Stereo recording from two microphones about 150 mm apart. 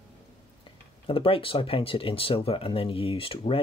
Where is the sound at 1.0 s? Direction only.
35° left (ahead or behind).